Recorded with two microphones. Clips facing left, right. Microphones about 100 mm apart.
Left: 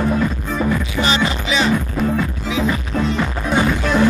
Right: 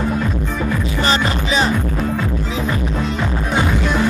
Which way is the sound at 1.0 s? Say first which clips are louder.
Right 1 dB; 40° right (ahead or behind).